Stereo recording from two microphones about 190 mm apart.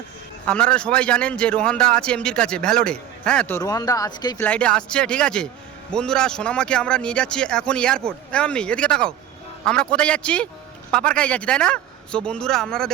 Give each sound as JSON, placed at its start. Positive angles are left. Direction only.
{"t": 0.4, "sound": "speech", "side_deg": 5}
{"t": 3.6, "sound": "speech", "side_deg": 20}
{"t": 4.4, "sound": "speech", "side_deg": 5}